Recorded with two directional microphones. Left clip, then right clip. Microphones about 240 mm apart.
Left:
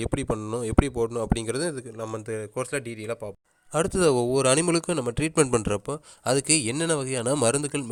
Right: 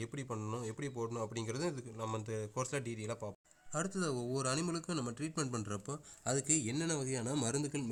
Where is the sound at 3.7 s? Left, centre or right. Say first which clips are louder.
Left 16 dB; left.